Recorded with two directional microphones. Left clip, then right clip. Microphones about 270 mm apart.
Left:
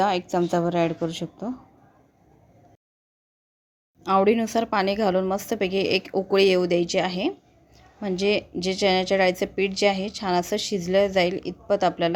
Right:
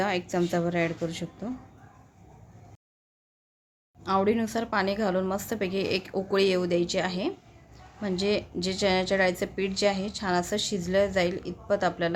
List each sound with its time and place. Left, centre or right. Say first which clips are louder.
0.0 s a woman's voice: left 5 dB; centre
4.0 s speech: left 5 dB; left